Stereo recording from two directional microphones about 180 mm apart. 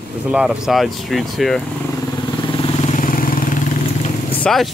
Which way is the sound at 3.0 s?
50° left (ahead or behind).